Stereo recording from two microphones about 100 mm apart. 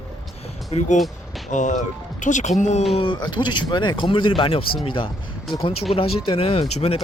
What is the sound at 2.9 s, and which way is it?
Speech, 65° left (ahead or behind).